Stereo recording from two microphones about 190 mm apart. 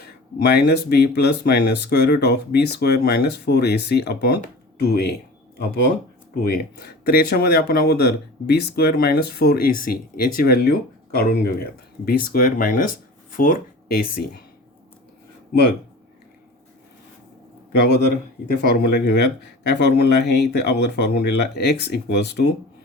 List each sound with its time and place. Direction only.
0.0 s speech: 55° left (ahead or behind)
6.4 s speech: 55° left (ahead or behind)
17.7 s a man's voice: 60° left (ahead or behind)